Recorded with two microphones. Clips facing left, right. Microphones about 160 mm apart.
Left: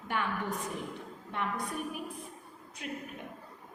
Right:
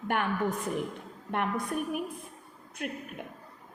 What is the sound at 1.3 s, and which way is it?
A woman's voice, 60° right (ahead or behind).